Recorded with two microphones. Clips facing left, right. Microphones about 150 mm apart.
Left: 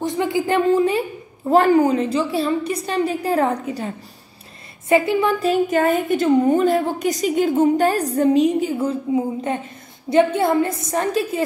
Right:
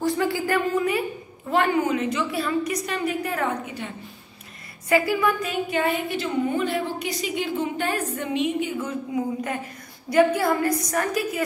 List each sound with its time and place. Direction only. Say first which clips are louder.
0.0 s a woman's voice: left 3 dB; 20° left (ahead or behind); by 3.9 s 35° left (ahead or behind)
4.8 s a woman's voice: left 4 dB; 25° left (ahead or behind)